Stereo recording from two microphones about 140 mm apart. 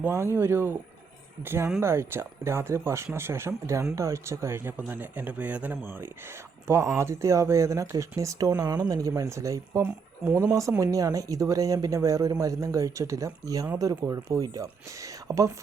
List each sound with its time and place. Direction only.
0.0 s speech: 20° right (ahead or behind)